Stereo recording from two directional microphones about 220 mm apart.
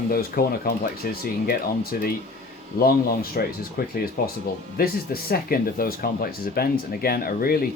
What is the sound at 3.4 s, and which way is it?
Speech, 40° left (ahead or behind).